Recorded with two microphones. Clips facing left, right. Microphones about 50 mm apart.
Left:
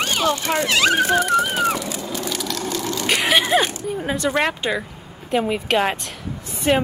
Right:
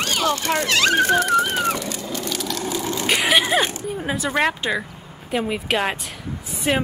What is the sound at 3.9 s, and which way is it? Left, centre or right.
A woman's voice, centre.